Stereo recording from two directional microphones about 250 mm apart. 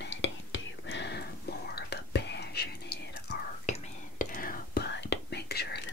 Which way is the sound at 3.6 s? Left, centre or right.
Left.